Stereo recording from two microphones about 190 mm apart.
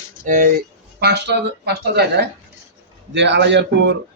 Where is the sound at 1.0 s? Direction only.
60° right (ahead or behind).